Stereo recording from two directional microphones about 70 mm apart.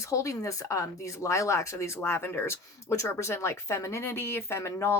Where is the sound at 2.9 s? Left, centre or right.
Left.